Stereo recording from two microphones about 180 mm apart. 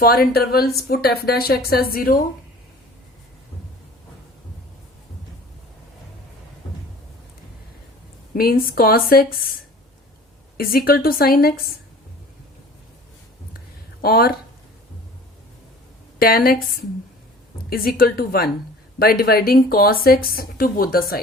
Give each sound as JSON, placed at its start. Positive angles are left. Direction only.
{"t": 0.0, "sound": "a woman's voice", "side_deg": 55}
{"t": 8.3, "sound": "speech", "side_deg": 55}
{"t": 10.6, "sound": "speech", "side_deg": 55}
{"t": 14.0, "sound": "speech", "side_deg": 55}
{"t": 16.1, "sound": "speech", "side_deg": 55}